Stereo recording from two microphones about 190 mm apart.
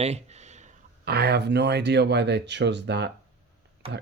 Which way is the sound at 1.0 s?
60° right (ahead or behind).